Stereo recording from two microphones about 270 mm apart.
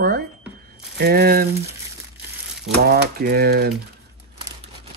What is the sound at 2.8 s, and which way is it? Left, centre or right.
Speech, right.